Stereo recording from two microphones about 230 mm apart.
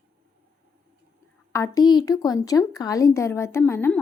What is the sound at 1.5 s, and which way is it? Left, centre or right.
A woman's voice, centre.